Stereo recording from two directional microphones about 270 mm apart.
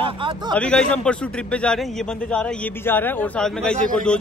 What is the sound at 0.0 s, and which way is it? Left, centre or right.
Speech, centre.